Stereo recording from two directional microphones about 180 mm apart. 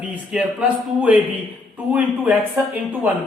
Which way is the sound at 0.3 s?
5° right (ahead or behind).